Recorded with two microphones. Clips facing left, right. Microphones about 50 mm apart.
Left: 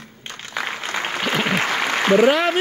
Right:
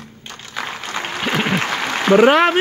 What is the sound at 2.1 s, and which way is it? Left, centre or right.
Speech, right.